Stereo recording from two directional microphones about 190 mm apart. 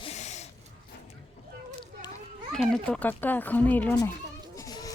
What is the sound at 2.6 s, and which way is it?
Speech, 5° left (ahead or behind).